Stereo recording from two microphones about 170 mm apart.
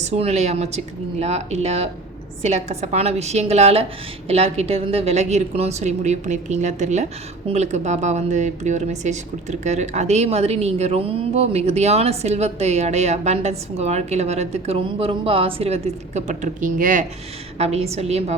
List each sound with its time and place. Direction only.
0.0 s a woman's voice: 40° right (ahead or behind)
17.6 s a woman's voice: 40° right (ahead or behind)